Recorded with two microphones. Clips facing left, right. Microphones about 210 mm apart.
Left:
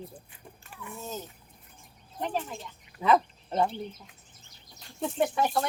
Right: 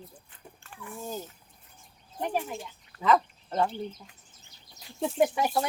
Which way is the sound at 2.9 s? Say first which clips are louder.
Even; 15° left (ahead or behind).